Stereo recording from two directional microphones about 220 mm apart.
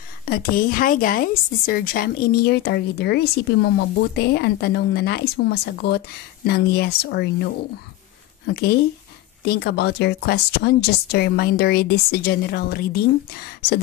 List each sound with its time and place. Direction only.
0.2 s a woman's voice: 40° left (ahead or behind)
9.4 s a woman's voice: 45° left (ahead or behind)